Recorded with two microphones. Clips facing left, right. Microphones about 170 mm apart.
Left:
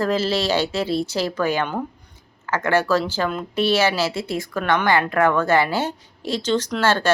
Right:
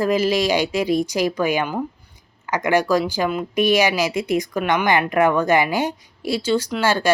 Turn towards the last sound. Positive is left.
turn(degrees=-10)  # may be behind; listen again after turning